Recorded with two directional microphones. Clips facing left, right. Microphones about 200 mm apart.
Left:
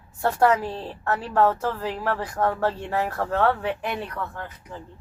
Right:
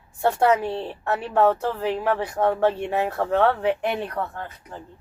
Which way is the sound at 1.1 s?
20° right (ahead or behind).